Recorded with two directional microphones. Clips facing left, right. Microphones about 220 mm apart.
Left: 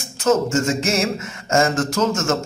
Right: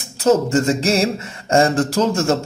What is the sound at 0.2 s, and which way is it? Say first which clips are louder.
A man's voice: right 3 dB; 35° right (ahead or behind).